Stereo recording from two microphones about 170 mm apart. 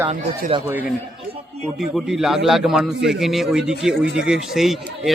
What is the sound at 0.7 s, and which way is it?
A man's voice, 10° right (ahead or behind).